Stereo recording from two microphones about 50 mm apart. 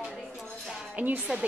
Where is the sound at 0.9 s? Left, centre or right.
Right.